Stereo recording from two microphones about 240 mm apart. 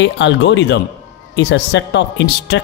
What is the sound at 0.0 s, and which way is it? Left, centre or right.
Speech, left.